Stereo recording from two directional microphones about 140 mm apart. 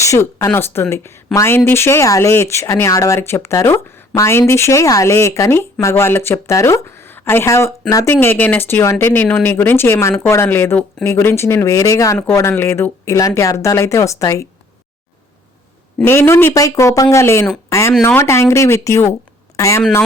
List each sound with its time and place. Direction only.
0.0 s speech: 20° left (ahead or behind)
16.0 s a woman's voice: 15° left (ahead or behind)